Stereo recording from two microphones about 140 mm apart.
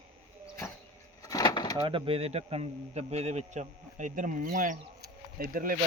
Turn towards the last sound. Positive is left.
turn(degrees=-90)